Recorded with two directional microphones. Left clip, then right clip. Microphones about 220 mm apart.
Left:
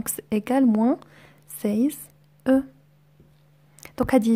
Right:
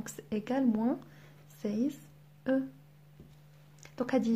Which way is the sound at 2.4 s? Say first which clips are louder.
Left 10 dB; 45° left (ahead or behind).